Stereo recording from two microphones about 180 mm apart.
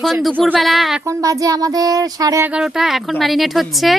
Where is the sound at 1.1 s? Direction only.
15° right (ahead or behind).